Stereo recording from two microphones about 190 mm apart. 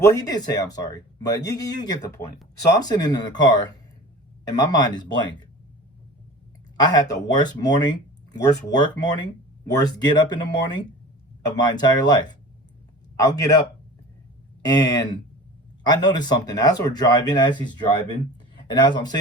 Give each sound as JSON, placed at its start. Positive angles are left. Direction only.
{"t": 0.0, "sound": "speech", "side_deg": 15}
{"t": 6.8, "sound": "a man's voice", "side_deg": 20}
{"t": 14.6, "sound": "speech", "side_deg": 20}